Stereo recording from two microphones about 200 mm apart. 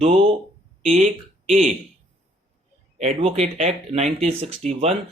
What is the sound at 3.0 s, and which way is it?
Speech, 30° right (ahead or behind).